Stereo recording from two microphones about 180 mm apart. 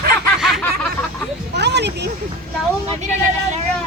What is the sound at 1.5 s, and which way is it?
Speech, 70° right (ahead or behind).